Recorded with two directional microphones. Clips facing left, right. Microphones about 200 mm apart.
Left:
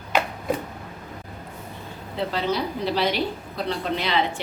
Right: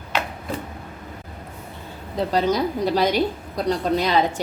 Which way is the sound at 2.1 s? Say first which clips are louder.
Right 5 dB; 40° right (ahead or behind).